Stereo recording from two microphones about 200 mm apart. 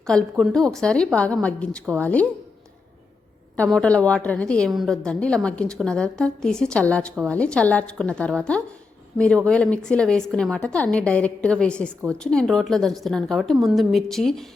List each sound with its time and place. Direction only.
0.1 s a woman's voice: centre (ahead or behind)
3.6 s a woman's voice: 5° left (ahead or behind)